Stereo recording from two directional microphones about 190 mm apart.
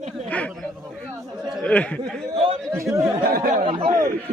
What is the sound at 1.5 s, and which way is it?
Speech, 5° left (ahead or behind).